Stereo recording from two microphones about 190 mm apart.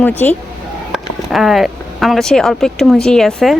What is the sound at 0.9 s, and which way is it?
Speech, centre (ahead or behind).